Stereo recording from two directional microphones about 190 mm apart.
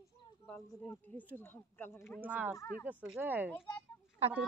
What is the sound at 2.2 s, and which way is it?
Speech, 10° right (ahead or behind).